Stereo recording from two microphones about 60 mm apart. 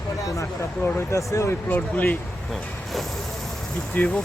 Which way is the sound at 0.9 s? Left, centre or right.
Left.